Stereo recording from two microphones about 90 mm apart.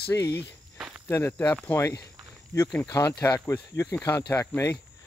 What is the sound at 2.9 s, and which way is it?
Speech, 40° left (ahead or behind).